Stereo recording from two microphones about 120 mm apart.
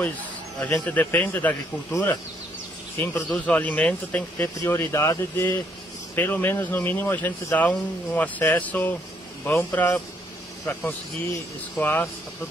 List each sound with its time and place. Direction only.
0.6 s speech: 10° left (ahead or behind)